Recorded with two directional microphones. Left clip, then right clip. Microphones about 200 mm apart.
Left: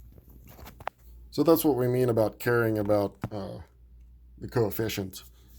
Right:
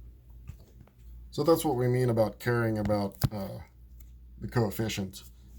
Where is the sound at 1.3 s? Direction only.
40° left (ahead or behind).